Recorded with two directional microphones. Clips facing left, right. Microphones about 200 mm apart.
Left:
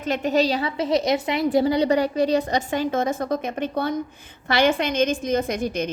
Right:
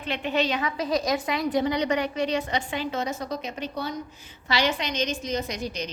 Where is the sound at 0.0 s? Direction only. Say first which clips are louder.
Left 6 dB; 40° left (ahead or behind).